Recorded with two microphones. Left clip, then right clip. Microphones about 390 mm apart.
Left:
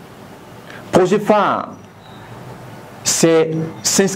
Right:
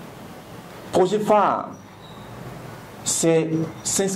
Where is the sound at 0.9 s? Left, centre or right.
Left.